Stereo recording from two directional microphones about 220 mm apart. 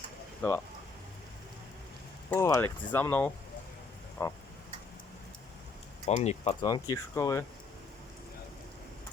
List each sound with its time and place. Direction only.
2.3 s speech: 10° left (ahead or behind)
6.1 s speech: 30° left (ahead or behind)
6.7 s speech: 15° left (ahead or behind)